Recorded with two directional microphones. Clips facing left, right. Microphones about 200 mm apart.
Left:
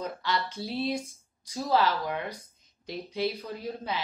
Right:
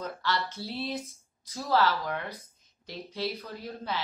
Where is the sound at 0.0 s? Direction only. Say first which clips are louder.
Left 1 dB; 15° left (ahead or behind).